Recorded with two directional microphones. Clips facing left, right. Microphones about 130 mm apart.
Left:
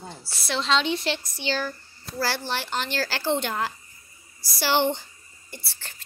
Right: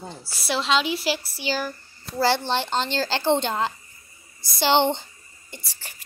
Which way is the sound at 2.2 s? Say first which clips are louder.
Right 6 dB; 20° right (ahead or behind).